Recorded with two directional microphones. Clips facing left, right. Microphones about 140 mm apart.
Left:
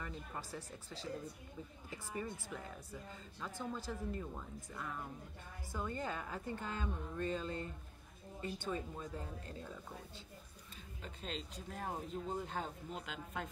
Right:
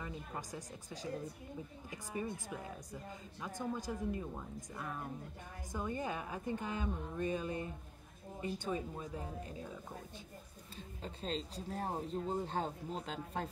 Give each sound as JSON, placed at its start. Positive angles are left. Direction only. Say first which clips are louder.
{"t": 0.0, "sound": "a woman's voice", "louder": "right 2 dB", "side_deg": -15}
{"t": 11.0, "sound": "speech", "louder": "right 5 dB", "side_deg": -35}